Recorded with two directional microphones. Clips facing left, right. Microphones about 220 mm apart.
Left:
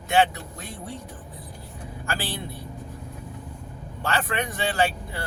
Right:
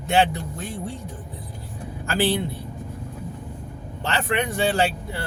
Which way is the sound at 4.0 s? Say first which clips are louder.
Right 3 dB; 25° right (ahead or behind).